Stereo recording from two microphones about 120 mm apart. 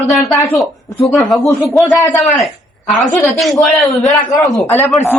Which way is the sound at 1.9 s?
30° left (ahead or behind).